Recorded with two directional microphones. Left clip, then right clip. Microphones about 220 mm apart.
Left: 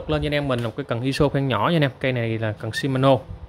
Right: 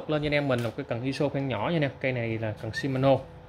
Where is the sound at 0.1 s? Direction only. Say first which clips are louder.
Left 3 dB; 15° left (ahead or behind).